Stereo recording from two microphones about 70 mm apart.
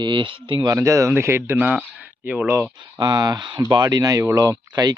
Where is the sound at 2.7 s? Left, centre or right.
Right.